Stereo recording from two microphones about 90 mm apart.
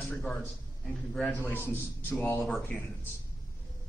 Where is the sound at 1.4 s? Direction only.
25° left (ahead or behind).